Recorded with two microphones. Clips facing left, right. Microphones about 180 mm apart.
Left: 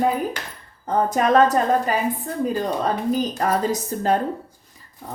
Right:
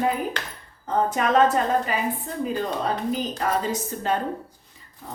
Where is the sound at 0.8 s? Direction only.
40° left (ahead or behind).